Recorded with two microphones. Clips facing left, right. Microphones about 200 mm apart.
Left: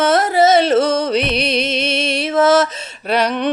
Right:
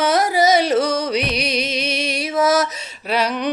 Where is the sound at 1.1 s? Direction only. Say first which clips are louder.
Left 4 dB; 10° right (ahead or behind).